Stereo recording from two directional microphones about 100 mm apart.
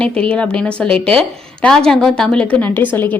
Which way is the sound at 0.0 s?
10° left (ahead or behind).